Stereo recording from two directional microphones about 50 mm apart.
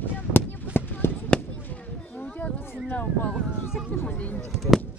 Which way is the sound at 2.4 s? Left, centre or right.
Left.